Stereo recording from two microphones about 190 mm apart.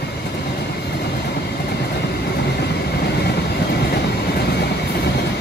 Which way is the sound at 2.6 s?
55° left (ahead or behind).